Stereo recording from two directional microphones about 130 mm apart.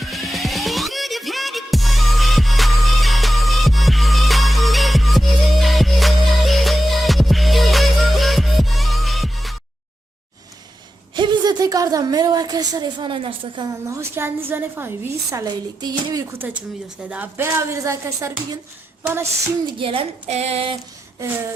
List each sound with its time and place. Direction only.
0.0 s music: centre (ahead or behind)
11.1 s a woman's voice: 35° right (ahead or behind)
13.7 s a woman's voice: 25° right (ahead or behind)
16.2 s a woman's voice: 15° right (ahead or behind)
19.7 s a woman's voice: 45° right (ahead or behind)